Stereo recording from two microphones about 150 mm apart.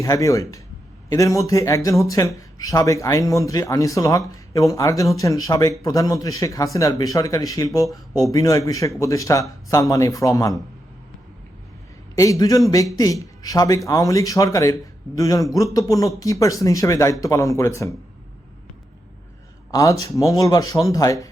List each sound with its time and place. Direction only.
0.0 s speech: 20° left (ahead or behind)
12.1 s speech: 20° left (ahead or behind)
19.7 s speech: 20° left (ahead or behind)